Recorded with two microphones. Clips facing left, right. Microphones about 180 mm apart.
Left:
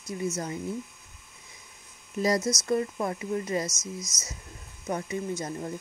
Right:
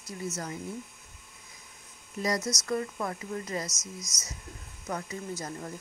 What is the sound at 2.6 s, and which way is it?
Speech, 25° left (ahead or behind).